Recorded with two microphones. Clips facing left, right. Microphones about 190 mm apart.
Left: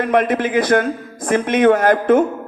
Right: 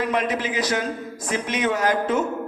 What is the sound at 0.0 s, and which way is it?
A man's voice, 55° left (ahead or behind).